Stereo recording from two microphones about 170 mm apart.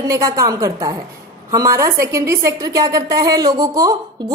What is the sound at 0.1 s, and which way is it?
A woman's voice, 20° right (ahead or behind).